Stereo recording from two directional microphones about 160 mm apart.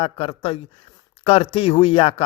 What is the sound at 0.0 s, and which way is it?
Speech, 35° left (ahead or behind).